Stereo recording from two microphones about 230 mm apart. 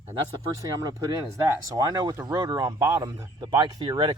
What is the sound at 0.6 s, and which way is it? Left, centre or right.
Speech, centre.